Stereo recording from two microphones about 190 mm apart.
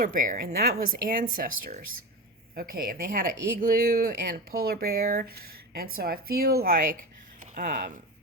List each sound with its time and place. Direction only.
0.0 s speech: 45° right (ahead or behind)